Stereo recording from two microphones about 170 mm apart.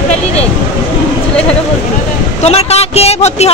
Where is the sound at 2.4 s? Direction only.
40° left (ahead or behind).